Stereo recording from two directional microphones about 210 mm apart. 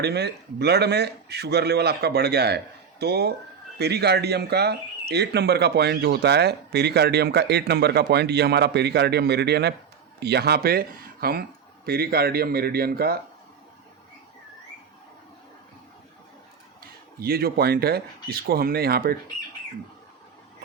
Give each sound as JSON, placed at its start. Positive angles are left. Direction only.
{"t": 0.0, "sound": "speech", "side_deg": -50}
{"t": 17.2, "sound": "speech", "side_deg": -45}